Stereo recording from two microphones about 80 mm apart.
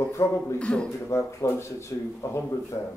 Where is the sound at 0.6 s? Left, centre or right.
Centre.